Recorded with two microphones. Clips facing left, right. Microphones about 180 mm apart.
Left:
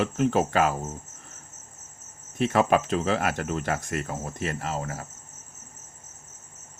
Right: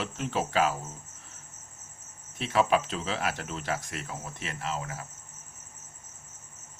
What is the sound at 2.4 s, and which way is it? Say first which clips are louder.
Speech: left 4 dB; 50° left (ahead or behind).